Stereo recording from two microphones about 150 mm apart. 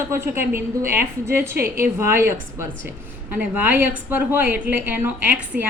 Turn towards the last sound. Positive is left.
turn(degrees=-10)  # may be behind; listen again after turning